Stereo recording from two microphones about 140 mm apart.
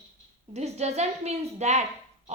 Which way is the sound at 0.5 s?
50° right (ahead or behind).